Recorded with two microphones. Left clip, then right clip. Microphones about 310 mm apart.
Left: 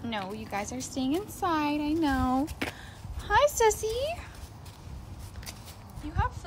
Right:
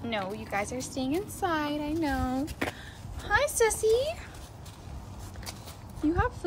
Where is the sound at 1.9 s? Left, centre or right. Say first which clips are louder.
Left 2 dB; left.